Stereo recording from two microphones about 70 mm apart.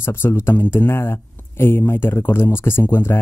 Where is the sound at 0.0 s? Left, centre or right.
Left.